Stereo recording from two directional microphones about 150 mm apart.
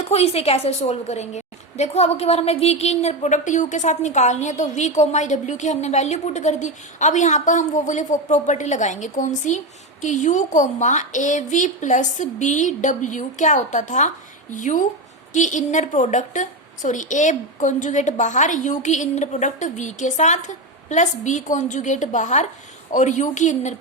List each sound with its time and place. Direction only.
0.0 s a woman's voice: 45° left (ahead or behind)